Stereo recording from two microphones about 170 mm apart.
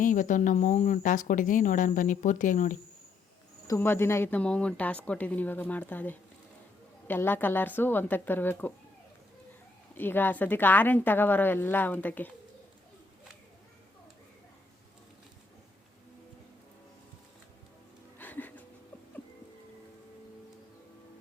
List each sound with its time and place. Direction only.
0.0 s speech: 50° left (ahead or behind)
3.7 s a woman's voice: 15° left (ahead or behind)
9.9 s a woman's voice: 10° left (ahead or behind)
18.2 s a sound: 10° left (ahead or behind)